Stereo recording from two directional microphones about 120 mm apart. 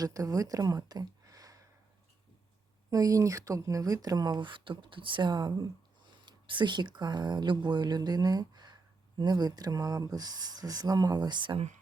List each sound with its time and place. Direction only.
0.0 s speech: 30° right (ahead or behind)
2.9 s speech: 30° right (ahead or behind)